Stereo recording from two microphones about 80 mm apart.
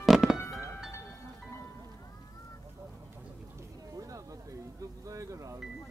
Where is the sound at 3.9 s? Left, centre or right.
Right.